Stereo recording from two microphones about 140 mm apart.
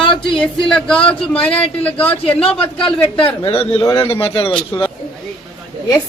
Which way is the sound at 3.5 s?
40° left (ahead or behind).